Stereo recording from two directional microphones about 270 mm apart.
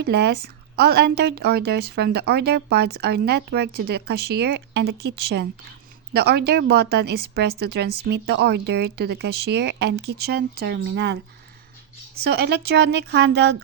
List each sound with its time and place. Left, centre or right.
0.0 s speech: right
12.2 s speech: right